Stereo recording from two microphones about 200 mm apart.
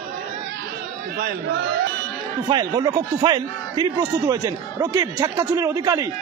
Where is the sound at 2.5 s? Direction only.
20° right (ahead or behind).